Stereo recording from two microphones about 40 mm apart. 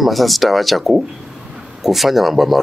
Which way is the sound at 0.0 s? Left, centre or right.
Centre.